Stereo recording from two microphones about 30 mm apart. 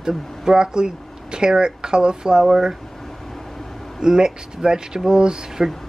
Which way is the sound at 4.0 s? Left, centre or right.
Right.